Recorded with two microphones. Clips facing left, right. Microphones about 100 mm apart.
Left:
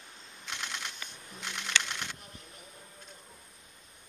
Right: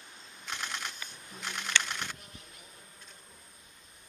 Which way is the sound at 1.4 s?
45° right (ahead or behind).